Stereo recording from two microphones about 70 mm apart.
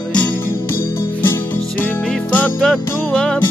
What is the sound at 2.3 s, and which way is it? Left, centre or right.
Music, left.